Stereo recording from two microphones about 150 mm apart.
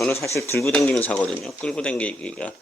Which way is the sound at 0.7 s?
10° left (ahead or behind).